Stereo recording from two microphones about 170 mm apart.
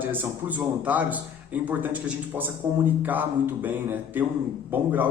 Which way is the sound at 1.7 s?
10° right (ahead or behind).